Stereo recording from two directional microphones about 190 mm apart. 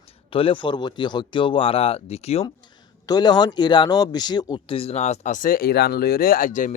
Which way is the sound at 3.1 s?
20° left (ahead or behind).